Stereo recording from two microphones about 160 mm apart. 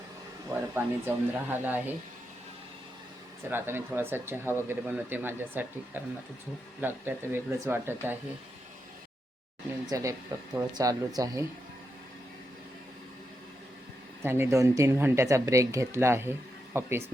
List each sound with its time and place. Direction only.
0.5 s speech: 10° right (ahead or behind)
3.5 s speech: 15° right (ahead or behind)
9.9 s speech: 20° right (ahead or behind)
14.2 s speech: 15° right (ahead or behind)